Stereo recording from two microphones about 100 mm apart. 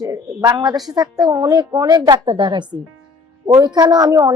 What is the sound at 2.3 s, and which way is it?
A woman's voice, 55° right (ahead or behind).